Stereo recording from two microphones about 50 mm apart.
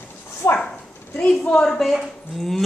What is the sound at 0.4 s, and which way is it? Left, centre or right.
Speech, left.